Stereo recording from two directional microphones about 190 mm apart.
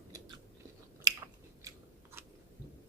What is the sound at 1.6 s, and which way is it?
Scissors, 15° right (ahead or behind).